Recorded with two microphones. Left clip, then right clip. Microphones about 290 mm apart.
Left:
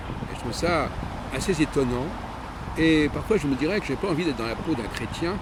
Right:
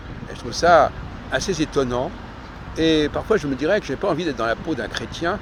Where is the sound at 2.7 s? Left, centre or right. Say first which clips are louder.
Right 3 dB; centre.